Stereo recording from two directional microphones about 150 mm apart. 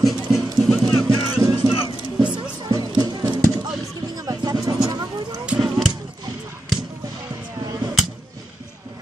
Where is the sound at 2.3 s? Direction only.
30° right (ahead or behind).